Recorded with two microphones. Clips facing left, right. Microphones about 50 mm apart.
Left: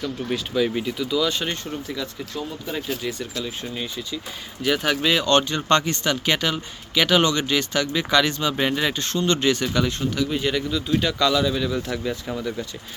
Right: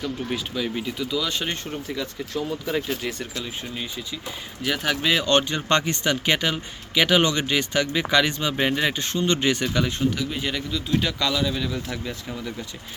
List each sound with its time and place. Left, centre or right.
0.0 s speech: centre
0.5 s speech: centre
2.3 s speech: right
2.9 s speech: right
3.3 s speech: centre
10.3 s speech: centre